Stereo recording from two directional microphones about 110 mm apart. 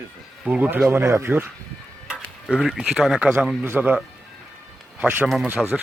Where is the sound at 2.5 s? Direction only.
5° right (ahead or behind).